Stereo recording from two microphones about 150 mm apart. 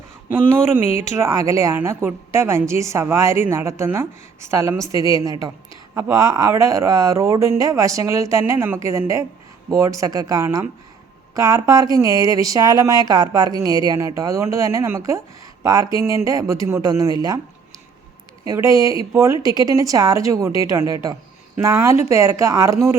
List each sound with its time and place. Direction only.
0.3 s a woman's voice: 15° right (ahead or behind)
4.9 s a woman's voice: 35° left (ahead or behind)
5.1 s speech: 25° right (ahead or behind)
18.4 s speech: 20° right (ahead or behind)